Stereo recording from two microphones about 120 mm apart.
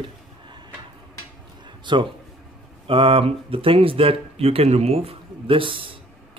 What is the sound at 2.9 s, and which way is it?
Speech, 50° right (ahead or behind).